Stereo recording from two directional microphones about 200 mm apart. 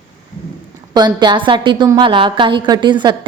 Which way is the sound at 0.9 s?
20° right (ahead or behind).